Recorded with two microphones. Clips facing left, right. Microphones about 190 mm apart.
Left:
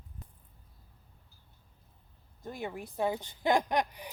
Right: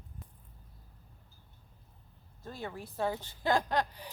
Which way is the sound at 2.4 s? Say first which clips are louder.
Left 3 dB; 15° left (ahead or behind).